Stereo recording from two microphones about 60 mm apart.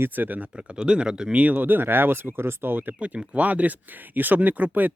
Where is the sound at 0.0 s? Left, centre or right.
Right.